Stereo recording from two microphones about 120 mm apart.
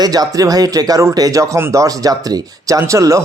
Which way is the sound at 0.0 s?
35° right (ahead or behind).